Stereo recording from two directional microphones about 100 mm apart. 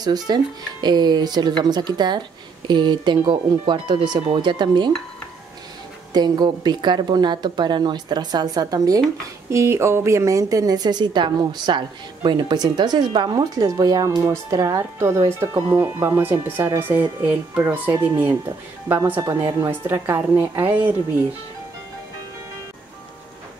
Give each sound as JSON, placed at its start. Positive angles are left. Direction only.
{"t": 0.0, "sound": "a woman's voice", "side_deg": -45}
{"t": 6.1, "sound": "a woman's voice", "side_deg": -45}
{"t": 9.5, "sound": "a woman's voice", "side_deg": -25}